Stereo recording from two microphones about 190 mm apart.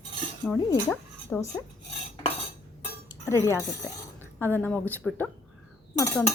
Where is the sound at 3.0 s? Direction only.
15° left (ahead or behind).